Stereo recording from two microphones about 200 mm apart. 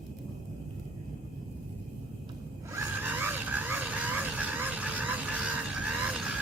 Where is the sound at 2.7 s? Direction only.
10° right (ahead or behind).